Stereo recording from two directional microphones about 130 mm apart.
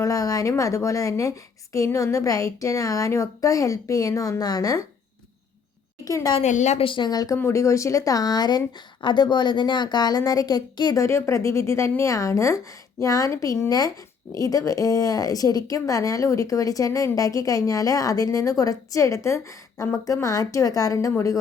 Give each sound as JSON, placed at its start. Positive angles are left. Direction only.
{"t": 0.0, "sound": "a woman's voice", "side_deg": 25}
{"t": 6.1, "sound": "a woman's voice", "side_deg": 25}
{"t": 6.4, "sound": "a woman's voice", "side_deg": 65}
{"t": 6.8, "sound": "speech", "side_deg": 35}
{"t": 11.0, "sound": "a woman's voice", "side_deg": 20}